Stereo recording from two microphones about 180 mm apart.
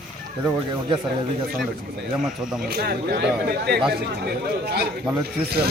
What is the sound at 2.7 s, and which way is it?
Speech, 60° right (ahead or behind).